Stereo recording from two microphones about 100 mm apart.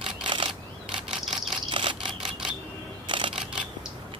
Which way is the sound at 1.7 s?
60° right (ahead or behind).